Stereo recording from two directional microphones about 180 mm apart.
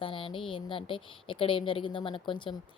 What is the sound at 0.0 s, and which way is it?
A woman's voice, 30° left (ahead or behind).